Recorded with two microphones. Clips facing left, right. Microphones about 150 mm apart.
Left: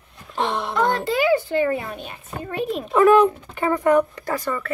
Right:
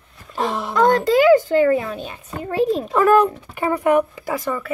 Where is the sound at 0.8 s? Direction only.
40° right (ahead or behind).